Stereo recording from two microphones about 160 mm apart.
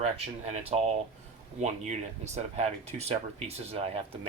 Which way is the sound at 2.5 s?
40° right (ahead or behind).